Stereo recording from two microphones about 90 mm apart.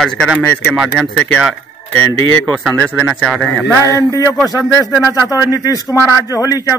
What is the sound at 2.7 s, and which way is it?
Speech, 15° left (ahead or behind).